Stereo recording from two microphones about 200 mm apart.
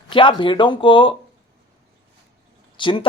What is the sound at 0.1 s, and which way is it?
A man's voice, 25° left (ahead or behind).